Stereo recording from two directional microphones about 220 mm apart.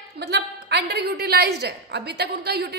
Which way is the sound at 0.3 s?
50° right (ahead or behind).